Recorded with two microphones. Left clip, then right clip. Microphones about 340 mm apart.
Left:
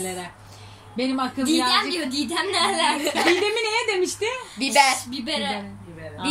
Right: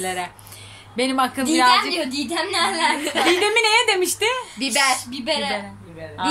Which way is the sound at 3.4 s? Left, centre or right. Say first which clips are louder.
Right 6 dB; right.